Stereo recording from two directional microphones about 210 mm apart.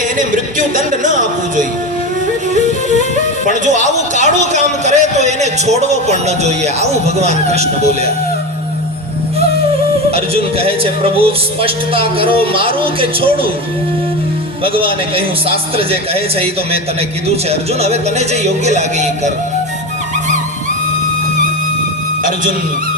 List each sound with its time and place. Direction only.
0.8 s music: 35° right (ahead or behind)
2.6 s music: 35° left (ahead or behind)
3.4 s a man's voice: 35° right (ahead or behind)
10.1 s speech: 30° right (ahead or behind)
14.6 s speech: 25° right (ahead or behind)
17.5 s speech: 30° right (ahead or behind)